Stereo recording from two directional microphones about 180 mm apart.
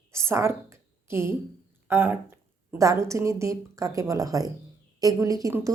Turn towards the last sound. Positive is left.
turn(degrees=-20)  # may be behind; listen again after turning